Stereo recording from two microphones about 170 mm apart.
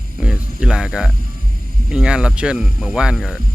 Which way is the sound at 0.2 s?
5° right (ahead or behind).